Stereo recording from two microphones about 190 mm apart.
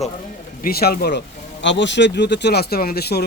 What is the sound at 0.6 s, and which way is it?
Speech, 55° left (ahead or behind).